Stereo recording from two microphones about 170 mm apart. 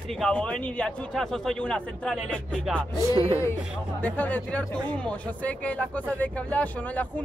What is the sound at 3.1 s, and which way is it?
Speech, 35° right (ahead or behind).